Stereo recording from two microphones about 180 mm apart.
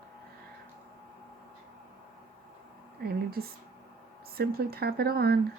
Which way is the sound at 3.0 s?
60° right (ahead or behind).